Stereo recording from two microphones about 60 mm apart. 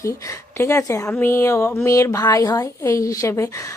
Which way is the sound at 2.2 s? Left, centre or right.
Left.